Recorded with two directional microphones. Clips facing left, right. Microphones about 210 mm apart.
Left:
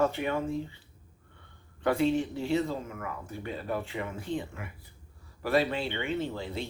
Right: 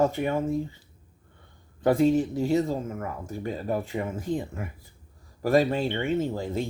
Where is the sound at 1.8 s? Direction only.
40° right (ahead or behind).